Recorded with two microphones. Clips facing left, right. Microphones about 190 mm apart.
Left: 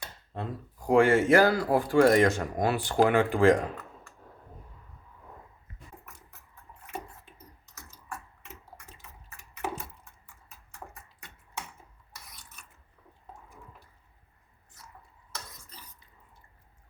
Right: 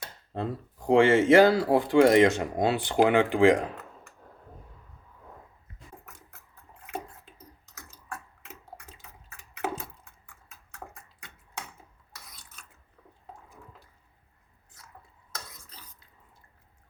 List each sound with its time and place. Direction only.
0.3 s speech: 25° right (ahead or behind)